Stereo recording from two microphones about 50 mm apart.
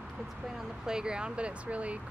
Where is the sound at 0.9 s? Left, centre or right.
Centre.